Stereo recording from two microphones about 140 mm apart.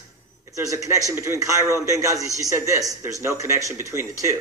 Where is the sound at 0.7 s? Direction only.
25° right (ahead or behind).